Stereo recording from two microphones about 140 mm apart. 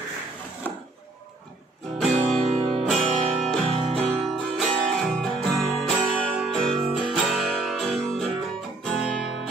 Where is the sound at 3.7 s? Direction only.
45° right (ahead or behind).